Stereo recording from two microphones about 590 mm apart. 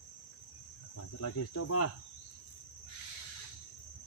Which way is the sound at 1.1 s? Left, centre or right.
Left.